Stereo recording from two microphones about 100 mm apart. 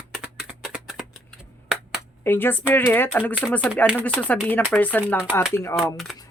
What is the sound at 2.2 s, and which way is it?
Speech, 20° left (ahead or behind).